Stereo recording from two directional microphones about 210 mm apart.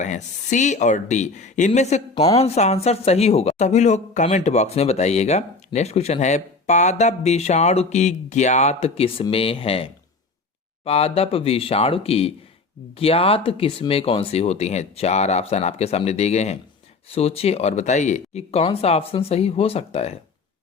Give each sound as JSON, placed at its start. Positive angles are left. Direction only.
{"t": 0.0, "sound": "speech", "side_deg": 35}